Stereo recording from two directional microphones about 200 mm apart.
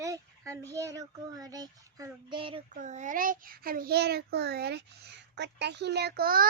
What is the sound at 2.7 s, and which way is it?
Child singing, 40° right (ahead or behind).